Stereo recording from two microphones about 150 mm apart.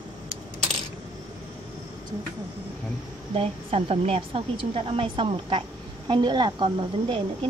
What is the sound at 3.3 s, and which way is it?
A woman's voice, 40° right (ahead or behind).